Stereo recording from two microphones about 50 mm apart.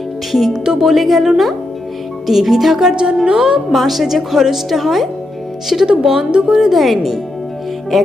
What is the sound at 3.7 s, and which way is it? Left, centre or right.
Speech, centre.